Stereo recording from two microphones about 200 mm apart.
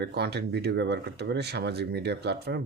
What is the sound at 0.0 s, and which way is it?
Speech, 55° right (ahead or behind).